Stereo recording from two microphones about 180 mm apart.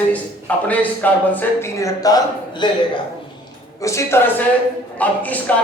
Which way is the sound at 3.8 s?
15° left (ahead or behind).